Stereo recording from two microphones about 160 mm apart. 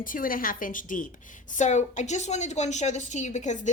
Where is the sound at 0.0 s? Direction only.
60° left (ahead or behind).